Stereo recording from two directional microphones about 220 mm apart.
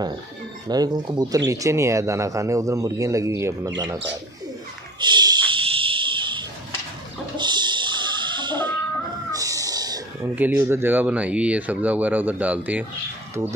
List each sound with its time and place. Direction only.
0.7 s speech: 20° right (ahead or behind)
5.0 s a sound: 20° right (ahead or behind)
7.3 s music: 20° right (ahead or behind)
9.3 s speech: 15° right (ahead or behind)